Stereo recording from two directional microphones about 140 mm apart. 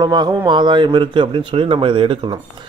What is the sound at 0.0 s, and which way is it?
A man's voice, 30° right (ahead or behind).